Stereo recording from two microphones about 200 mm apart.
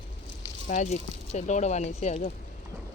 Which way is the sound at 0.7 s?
35° left (ahead or behind).